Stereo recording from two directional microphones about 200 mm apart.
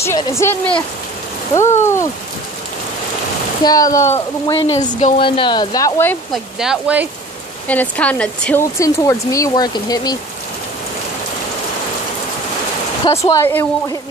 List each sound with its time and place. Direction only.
0.0 s speech: 15° left (ahead or behind)
3.6 s speech: 20° left (ahead or behind)
5.0 s speech: 30° left (ahead or behind)
6.3 s speech: 5° right (ahead or behind)
7.6 s speech: 5° left (ahead or behind)
13.1 s speech: 15° left (ahead or behind)